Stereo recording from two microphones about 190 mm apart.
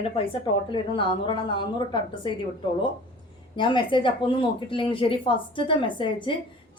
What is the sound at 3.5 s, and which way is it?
A woman's voice, 25° left (ahead or behind).